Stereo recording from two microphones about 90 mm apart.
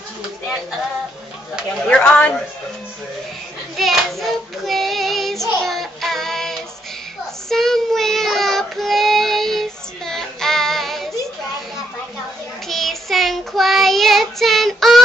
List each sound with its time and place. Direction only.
1.8 s speech: 10° left (ahead or behind)
3.7 s child singing: centre (ahead or behind)
12.6 s child singing: centre (ahead or behind)